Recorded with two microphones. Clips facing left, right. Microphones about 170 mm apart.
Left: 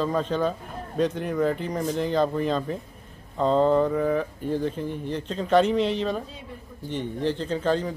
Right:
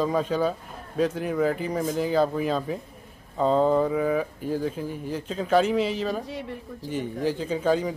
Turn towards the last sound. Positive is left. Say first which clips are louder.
# right 1 dB
turn(degrees=-10)  # may be behind; listen again after turning